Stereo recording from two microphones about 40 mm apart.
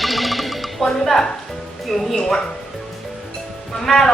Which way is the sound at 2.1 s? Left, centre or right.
Centre.